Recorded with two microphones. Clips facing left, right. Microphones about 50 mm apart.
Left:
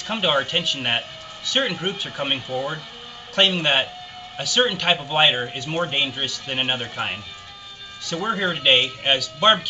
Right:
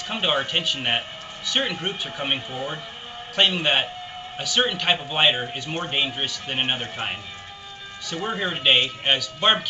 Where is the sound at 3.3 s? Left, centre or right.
Centre.